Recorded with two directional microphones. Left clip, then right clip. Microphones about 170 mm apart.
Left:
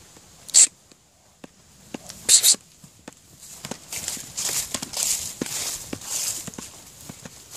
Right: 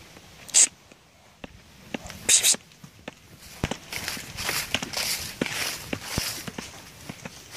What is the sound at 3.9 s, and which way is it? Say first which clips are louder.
Walk: right 1 dB; 5° left (ahead or behind).